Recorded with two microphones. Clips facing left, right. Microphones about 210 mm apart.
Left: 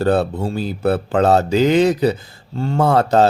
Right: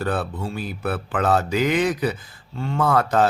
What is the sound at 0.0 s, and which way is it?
Speech, 30° left (ahead or behind).